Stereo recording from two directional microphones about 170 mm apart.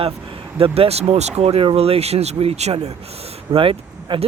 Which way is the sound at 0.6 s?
35° right (ahead or behind).